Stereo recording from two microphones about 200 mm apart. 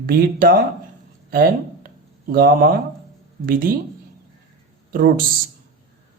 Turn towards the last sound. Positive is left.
turn(degrees=-45)  # may be behind; listen again after turning